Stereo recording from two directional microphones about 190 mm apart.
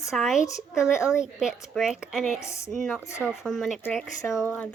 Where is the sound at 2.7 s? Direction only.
5° left (ahead or behind).